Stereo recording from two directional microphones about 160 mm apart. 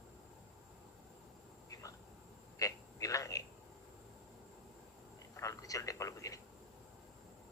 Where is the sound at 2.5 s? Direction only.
20° left (ahead or behind).